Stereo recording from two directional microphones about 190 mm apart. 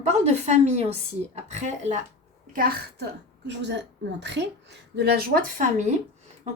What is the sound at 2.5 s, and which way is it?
A woman's voice, 50° right (ahead or behind).